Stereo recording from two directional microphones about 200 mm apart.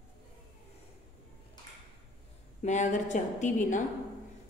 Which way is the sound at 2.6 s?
35° left (ahead or behind).